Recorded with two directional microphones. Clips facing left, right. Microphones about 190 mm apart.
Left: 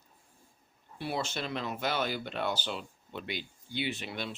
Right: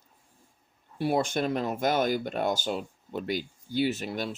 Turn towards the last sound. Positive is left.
turn(degrees=-45)  # may be behind; listen again after turning